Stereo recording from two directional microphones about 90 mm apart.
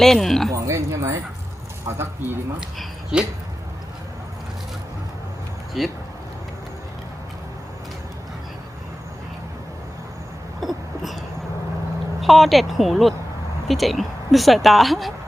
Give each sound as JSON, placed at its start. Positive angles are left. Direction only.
{"t": 0.0, "sound": "speech", "side_deg": 5}
{"t": 0.5, "sound": "speech", "side_deg": -35}
{"t": 2.6, "sound": "speech", "side_deg": -10}
{"t": 5.8, "sound": "speech", "side_deg": 0}
{"t": 10.6, "sound": "a sound", "side_deg": 0}
{"t": 12.2, "sound": "speech", "side_deg": 0}